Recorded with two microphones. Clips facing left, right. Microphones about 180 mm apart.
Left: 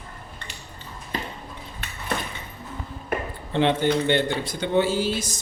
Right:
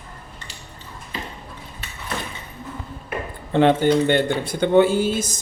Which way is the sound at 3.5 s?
50° right (ahead or behind).